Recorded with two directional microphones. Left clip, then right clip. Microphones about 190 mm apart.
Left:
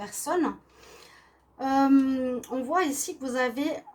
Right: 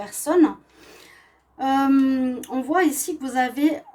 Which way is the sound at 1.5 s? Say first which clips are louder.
Right 3 dB; 45° right (ahead or behind).